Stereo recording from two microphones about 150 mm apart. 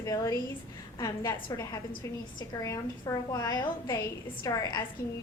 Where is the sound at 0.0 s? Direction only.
20° left (ahead or behind).